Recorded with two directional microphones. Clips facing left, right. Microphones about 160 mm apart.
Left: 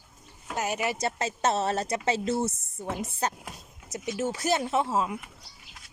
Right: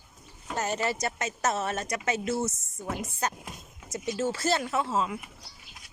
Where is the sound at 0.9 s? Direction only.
25° left (ahead or behind).